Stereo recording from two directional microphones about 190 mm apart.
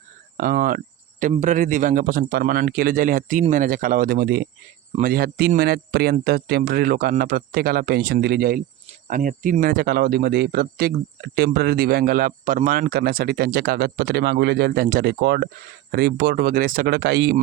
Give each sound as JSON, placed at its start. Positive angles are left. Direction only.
{"t": 0.3, "sound": "cricket", "side_deg": -50}
{"t": 1.3, "sound": "speech", "side_deg": -40}